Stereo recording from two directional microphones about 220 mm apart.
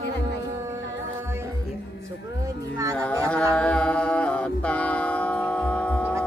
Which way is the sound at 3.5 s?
5° left (ahead or behind).